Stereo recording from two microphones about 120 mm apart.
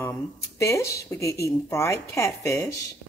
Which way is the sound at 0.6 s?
25° left (ahead or behind).